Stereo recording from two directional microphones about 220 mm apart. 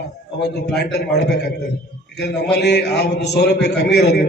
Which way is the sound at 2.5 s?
50° left (ahead or behind).